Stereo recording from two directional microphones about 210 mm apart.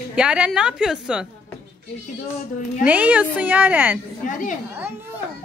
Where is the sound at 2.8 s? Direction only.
5° right (ahead or behind).